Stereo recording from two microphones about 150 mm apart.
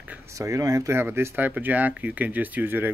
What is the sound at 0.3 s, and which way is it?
Speech, 20° right (ahead or behind).